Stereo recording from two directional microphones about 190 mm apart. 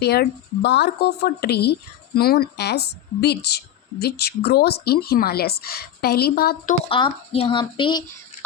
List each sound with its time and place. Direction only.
0.0 s speech: 60° left (ahead or behind)
6.8 s speech: 30° left (ahead or behind)